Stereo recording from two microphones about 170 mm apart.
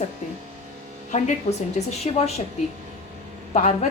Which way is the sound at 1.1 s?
45° left (ahead or behind).